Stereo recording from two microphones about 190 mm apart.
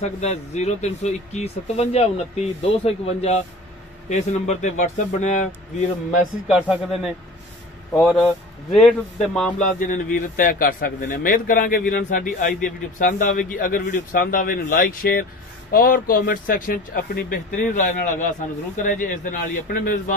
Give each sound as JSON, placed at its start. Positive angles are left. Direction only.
{"t": 0.2, "sound": "speech", "side_deg": 35}
{"t": 7.9, "sound": "speech", "side_deg": 0}
{"t": 9.8, "sound": "a man's voice", "side_deg": 45}